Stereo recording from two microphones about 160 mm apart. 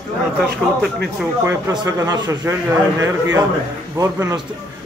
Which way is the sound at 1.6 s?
20° right (ahead or behind).